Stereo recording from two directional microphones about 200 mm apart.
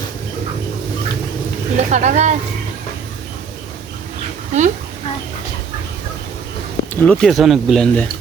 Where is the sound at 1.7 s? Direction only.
35° right (ahead or behind).